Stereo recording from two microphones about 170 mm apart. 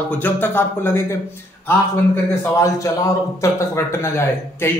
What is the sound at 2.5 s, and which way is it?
Speech, 15° left (ahead or behind).